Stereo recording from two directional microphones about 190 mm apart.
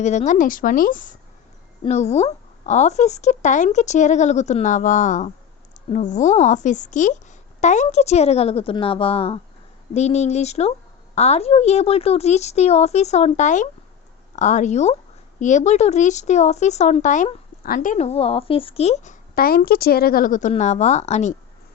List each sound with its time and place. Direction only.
0.0 s a woman's voice: 35° left (ahead or behind)
1.8 s speech: 35° left (ahead or behind)
19.3 s a woman's voice: 50° left (ahead or behind)